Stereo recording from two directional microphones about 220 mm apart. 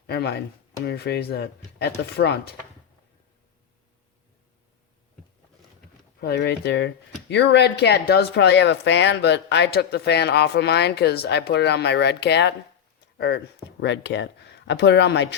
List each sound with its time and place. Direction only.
0.1 s speech: 50° left (ahead or behind)
6.1 s speech: 45° left (ahead or behind)